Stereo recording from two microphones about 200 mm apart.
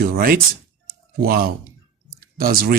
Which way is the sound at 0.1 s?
50° right (ahead or behind).